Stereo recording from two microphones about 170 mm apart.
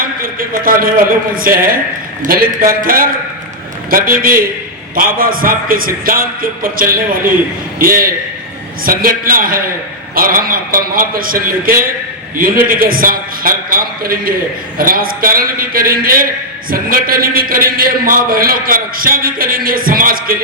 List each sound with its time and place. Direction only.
0.0 s a man's voice: 60° right (ahead or behind)